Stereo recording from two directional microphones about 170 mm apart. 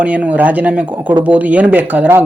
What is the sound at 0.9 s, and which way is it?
Speech, 25° right (ahead or behind).